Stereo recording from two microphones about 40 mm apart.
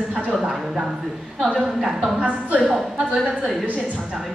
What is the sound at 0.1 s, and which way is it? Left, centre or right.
Speech, right.